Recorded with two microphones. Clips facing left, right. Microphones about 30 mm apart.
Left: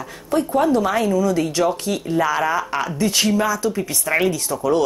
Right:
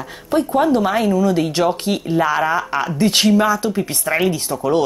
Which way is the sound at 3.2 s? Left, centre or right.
Right.